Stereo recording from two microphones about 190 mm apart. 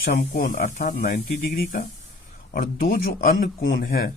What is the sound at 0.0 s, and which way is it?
Speech, 45° left (ahead or behind).